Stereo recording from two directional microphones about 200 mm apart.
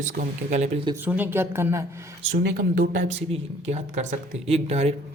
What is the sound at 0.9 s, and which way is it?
A man's voice, 10° right (ahead or behind).